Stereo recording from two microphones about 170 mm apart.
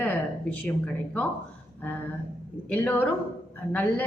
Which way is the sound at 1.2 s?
10° left (ahead or behind).